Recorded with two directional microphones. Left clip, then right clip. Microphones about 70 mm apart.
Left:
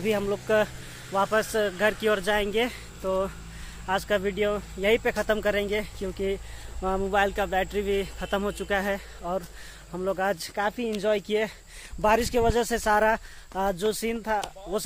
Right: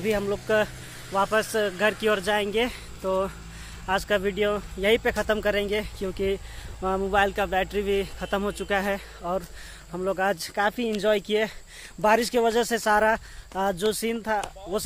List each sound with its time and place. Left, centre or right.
0.2 s speech: centre
1.8 s speech: right
2.2 s speech: centre
3.1 s speech: right
5.2 s speech: centre
5.7 s speech: right
6.0 s speech: right
6.8 s speech: centre
8.3 s speech: centre
14.7 s speech: centre